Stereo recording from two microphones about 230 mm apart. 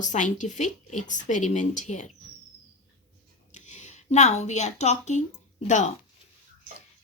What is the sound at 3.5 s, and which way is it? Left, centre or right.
A woman's voice, left.